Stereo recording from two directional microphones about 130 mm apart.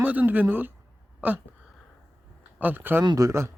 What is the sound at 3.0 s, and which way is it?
Speech, 25° right (ahead or behind).